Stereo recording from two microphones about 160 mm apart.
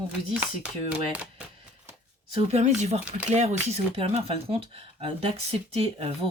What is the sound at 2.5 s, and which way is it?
Speech, 45° right (ahead or behind).